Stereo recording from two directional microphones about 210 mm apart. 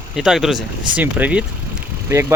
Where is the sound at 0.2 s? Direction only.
Centre (ahead or behind).